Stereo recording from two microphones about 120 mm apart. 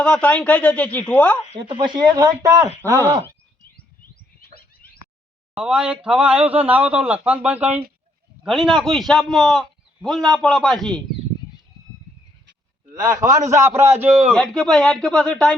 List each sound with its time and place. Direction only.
0.0 s speech: 10° left (ahead or behind)
1.5 s speech: 40° right (ahead or behind)
5.5 s a man's voice: 10° right (ahead or behind)
8.4 s a man's voice: centre (ahead or behind)
12.9 s a man's voice: 30° right (ahead or behind)
14.3 s a man's voice: 5° left (ahead or behind)